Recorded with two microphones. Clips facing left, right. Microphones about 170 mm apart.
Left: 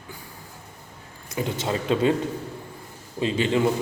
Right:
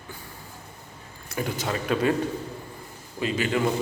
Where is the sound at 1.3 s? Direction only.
20° left (ahead or behind).